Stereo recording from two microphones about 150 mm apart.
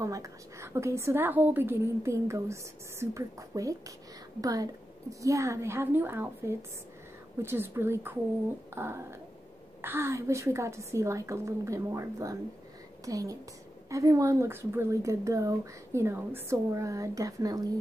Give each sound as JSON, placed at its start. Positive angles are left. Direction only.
{"t": 0.0, "sound": "a woman's voice", "side_deg": -20}